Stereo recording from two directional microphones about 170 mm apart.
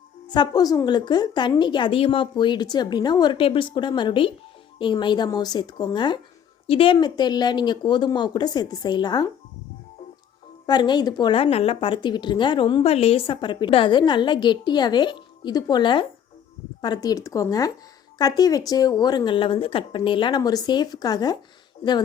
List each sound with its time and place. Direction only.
0.3 s a woman's voice: 25° left (ahead or behind)
10.7 s a woman's voice: 25° left (ahead or behind)